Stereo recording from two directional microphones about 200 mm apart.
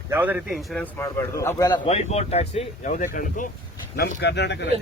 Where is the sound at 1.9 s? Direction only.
30° left (ahead or behind); by 4.7 s 60° left (ahead or behind).